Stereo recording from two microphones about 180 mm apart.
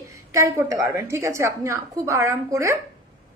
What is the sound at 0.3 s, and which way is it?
A woman's voice, 15° right (ahead or behind).